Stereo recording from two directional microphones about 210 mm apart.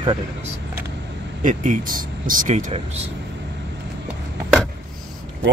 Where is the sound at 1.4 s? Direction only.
35° right (ahead or behind).